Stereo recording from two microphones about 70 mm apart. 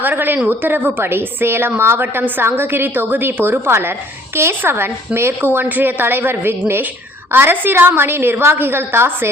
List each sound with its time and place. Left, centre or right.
0.0 s a woman's voice: right